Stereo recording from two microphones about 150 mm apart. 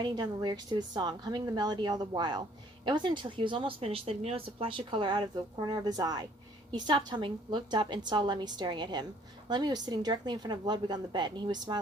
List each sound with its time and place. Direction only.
0.0 s a woman's voice: 30° right (ahead or behind)